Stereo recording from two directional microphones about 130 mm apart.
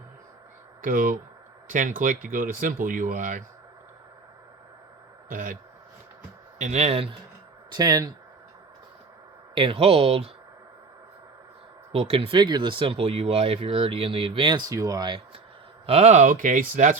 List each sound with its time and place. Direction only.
0.8 s speech: 90° right
5.3 s speech: 90° right
6.6 s speech: 60° right (ahead or behind)
7.7 s speech: 30° right (ahead or behind)
9.6 s speech: 45° right (ahead or behind)
11.9 s speech: 50° right (ahead or behind)
15.9 s speech: 55° right (ahead or behind); by 17.0 s 85° right